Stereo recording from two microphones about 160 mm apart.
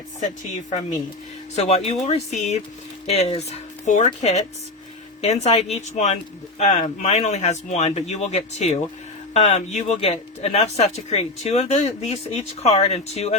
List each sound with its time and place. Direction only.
0.7 s speech: 50° left (ahead or behind)